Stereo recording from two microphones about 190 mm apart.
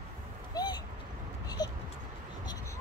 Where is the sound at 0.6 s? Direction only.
20° left (ahead or behind).